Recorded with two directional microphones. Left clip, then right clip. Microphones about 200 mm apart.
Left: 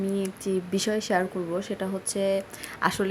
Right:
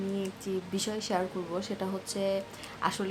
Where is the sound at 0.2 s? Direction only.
20° left (ahead or behind).